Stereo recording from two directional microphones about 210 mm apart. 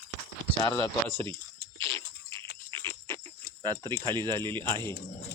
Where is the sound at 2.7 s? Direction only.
10° left (ahead or behind).